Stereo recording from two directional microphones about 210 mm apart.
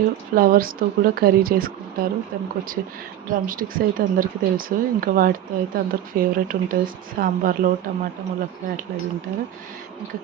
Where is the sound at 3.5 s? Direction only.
40° right (ahead or behind).